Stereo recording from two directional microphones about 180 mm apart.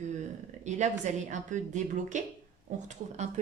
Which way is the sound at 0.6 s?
40° right (ahead or behind).